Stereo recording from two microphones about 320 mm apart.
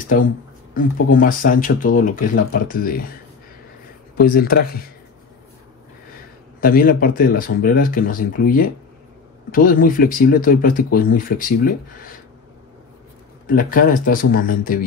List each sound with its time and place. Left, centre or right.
1.1 s speech: left
4.2 s speech: left
6.6 s speech: left
13.5 s speech: left